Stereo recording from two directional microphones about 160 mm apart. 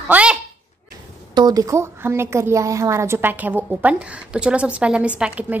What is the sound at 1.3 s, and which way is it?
A woman's voice, 25° right (ahead or behind).